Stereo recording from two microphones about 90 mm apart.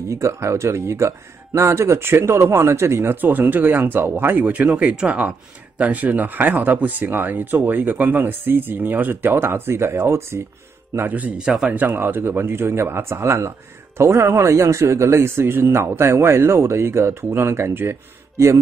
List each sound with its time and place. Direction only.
0.1 s speech: 35° right (ahead or behind); by 11.7 s 10° right (ahead or behind)
11.7 s speech: 25° right (ahead or behind)